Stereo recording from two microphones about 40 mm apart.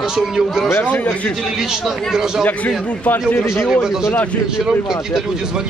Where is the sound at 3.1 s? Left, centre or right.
Left.